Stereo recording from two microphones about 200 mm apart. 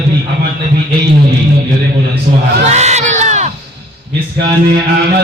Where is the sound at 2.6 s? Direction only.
35° right (ahead or behind).